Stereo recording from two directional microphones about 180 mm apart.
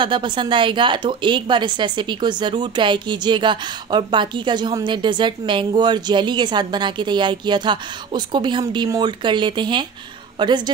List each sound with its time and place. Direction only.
0.0 s a woman's voice: 25° right (ahead or behind)